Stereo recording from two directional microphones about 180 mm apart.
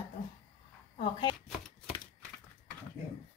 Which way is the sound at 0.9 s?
25° left (ahead or behind).